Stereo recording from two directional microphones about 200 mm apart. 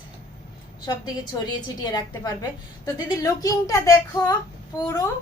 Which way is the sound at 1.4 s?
20° left (ahead or behind).